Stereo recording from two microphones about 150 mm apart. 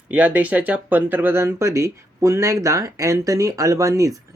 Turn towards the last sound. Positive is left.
turn(degrees=-20)  # may be behind; listen again after turning